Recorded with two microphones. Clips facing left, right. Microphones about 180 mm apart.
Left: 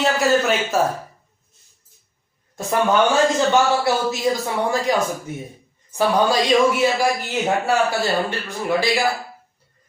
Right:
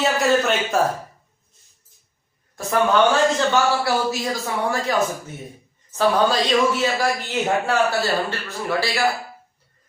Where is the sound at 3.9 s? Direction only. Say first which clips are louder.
Left 2 dB; 20° left (ahead or behind).